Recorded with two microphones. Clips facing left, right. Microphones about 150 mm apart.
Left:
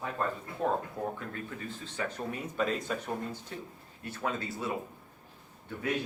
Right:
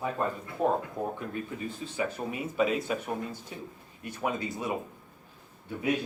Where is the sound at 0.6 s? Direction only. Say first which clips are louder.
Right 3 dB; 15° right (ahead or behind).